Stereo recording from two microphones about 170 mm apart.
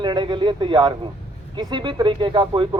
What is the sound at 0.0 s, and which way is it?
Speech, 25° right (ahead or behind).